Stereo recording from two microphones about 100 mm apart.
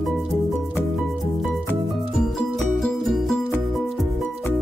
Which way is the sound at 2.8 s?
Centre (ahead or behind).